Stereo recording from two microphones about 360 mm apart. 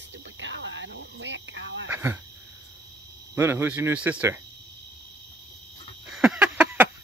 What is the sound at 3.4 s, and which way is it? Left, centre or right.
Speech, centre.